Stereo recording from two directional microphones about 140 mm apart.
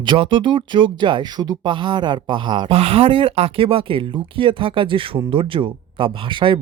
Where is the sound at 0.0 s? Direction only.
35° right (ahead or behind).